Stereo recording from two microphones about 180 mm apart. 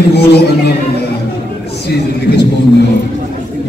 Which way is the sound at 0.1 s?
65° left (ahead or behind).